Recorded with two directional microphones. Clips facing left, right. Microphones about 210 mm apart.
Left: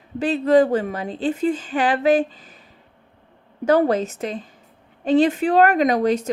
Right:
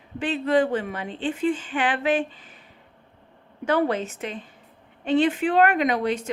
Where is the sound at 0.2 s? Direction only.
40° left (ahead or behind).